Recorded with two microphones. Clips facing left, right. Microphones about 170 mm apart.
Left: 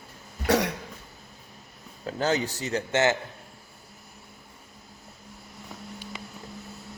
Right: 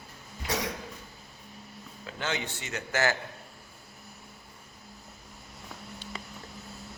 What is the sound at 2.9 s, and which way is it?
Speech, 20° left (ahead or behind).